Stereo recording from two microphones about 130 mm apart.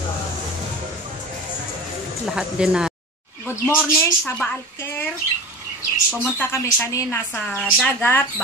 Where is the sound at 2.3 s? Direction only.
5° right (ahead or behind).